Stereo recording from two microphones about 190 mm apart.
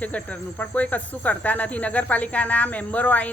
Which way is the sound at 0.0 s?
5° left (ahead or behind).